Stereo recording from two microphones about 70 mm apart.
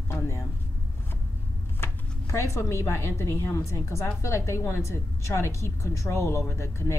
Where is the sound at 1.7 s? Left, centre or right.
Left.